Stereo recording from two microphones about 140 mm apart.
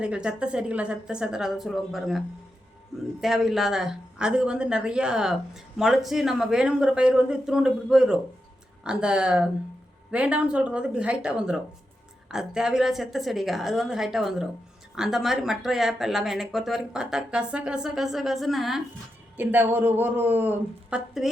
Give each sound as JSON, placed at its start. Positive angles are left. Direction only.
{"t": 0.0, "sound": "speech", "side_deg": -5}
{"t": 19.4, "sound": "speech", "side_deg": -15}
{"t": 21.2, "sound": "speech", "side_deg": -5}